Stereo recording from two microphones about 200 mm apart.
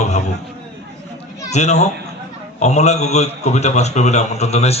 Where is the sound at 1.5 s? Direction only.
35° left (ahead or behind).